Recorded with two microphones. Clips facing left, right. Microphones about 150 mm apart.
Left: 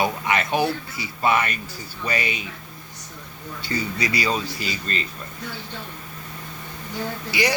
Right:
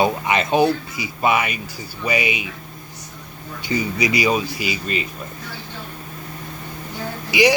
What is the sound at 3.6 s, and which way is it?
Speech, 15° right (ahead or behind).